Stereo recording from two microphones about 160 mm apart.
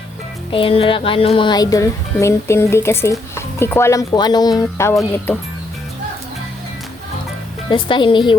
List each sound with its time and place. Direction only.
0.5 s speech: 35° left (ahead or behind)
7.9 s speech: 30° left (ahead or behind)